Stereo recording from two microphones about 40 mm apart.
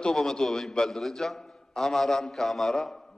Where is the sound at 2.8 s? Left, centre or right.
Centre.